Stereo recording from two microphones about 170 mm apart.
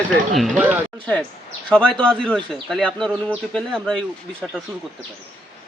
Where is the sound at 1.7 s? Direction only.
5° left (ahead or behind).